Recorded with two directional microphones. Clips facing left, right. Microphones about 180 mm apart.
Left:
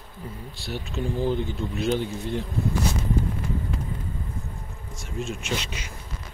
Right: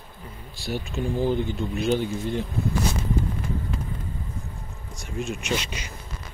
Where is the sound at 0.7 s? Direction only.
5° right (ahead or behind).